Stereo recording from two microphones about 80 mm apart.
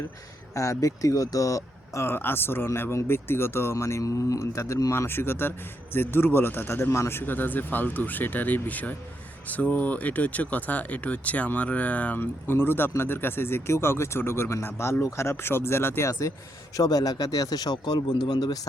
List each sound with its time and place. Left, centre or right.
0.5 s speech: left
16.7 s speech: left